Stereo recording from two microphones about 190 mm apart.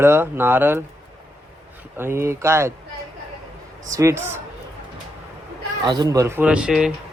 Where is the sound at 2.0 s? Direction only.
15° right (ahead or behind).